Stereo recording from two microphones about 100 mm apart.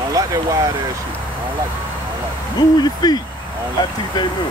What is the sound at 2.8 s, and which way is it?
Speech, 45° left (ahead or behind).